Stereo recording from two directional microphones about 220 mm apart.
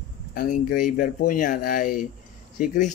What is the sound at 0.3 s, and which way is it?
Speech, 40° left (ahead or behind).